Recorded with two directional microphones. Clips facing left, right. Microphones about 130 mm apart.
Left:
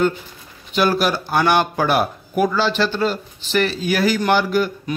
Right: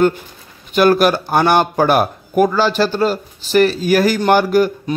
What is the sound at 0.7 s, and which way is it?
A man's voice, 55° right (ahead or behind).